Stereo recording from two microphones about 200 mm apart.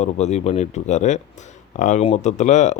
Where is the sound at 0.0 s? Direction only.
35° left (ahead or behind).